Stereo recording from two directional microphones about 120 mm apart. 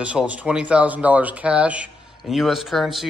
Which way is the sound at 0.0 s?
10° right (ahead or behind).